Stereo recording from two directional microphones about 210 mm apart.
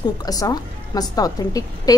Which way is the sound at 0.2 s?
15° left (ahead or behind).